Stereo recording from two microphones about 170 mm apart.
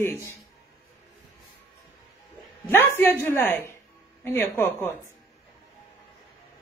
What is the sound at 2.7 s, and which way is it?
Speech, 10° left (ahead or behind).